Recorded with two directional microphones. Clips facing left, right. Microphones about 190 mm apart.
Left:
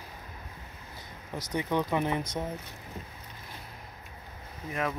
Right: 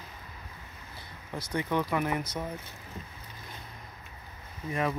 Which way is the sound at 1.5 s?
20° left (ahead or behind).